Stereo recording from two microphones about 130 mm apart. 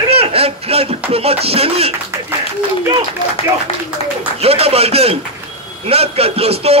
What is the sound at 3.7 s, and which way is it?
Speech, 50° left (ahead or behind).